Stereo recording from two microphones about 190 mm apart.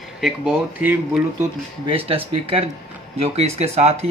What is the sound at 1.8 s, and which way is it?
Speech, 30° right (ahead or behind).